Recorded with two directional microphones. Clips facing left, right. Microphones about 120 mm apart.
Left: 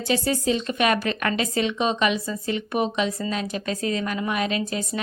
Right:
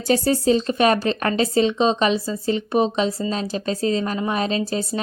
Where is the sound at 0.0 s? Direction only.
40° right (ahead or behind).